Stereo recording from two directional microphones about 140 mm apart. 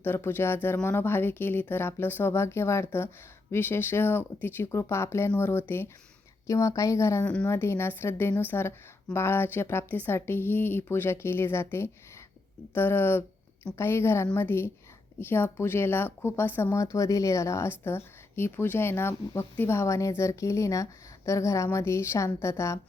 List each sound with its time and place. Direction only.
0.0 s a woman's voice: 15° left (ahead or behind)